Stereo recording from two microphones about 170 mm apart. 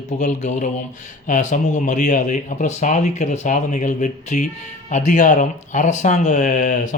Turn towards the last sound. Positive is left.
turn(degrees=45)  # may be behind; listen again after turning